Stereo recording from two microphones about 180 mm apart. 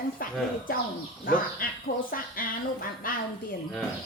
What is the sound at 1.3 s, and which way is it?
Speech, 55° left (ahead or behind).